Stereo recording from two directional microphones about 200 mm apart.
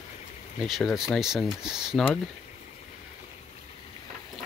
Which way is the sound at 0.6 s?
Centre (ahead or behind).